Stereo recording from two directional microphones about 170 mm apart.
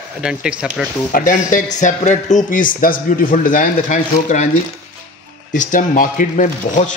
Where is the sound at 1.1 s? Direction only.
50° left (ahead or behind).